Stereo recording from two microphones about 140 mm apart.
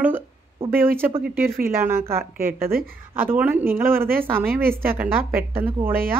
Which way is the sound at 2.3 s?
90° right.